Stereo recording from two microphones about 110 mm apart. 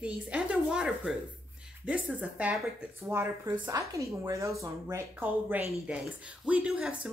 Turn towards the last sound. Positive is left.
turn(degrees=-10)  # may be behind; listen again after turning